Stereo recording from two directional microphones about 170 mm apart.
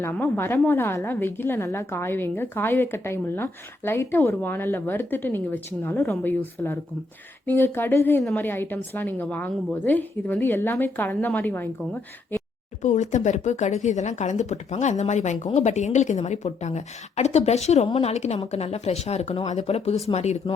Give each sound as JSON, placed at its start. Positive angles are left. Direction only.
{"t": 0.0, "sound": "a woman's voice", "side_deg": 10}
{"t": 12.8, "sound": "speech", "side_deg": 45}